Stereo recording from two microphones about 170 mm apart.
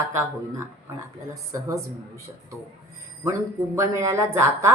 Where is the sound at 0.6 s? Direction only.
15° right (ahead or behind).